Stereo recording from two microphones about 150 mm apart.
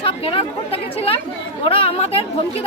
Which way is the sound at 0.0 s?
40° left (ahead or behind).